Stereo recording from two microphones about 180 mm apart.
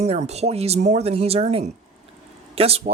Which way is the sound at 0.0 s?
35° right (ahead or behind).